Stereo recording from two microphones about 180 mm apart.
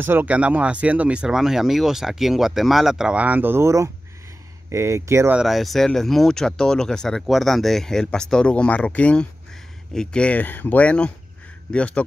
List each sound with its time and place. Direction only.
0.0 s speech: 10° right (ahead or behind)
5.4 s speech: centre (ahead or behind)